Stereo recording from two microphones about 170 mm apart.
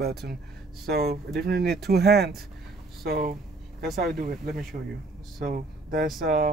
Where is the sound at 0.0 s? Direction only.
70° right (ahead or behind).